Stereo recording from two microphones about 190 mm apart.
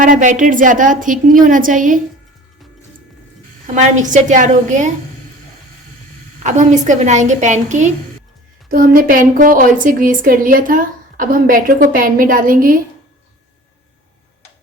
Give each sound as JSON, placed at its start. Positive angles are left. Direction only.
{"t": 0.0, "sound": "a woman's voice", "side_deg": -45}
{"t": 3.8, "sound": "a child's voice", "side_deg": -40}
{"t": 6.4, "sound": "a child's voice", "side_deg": -40}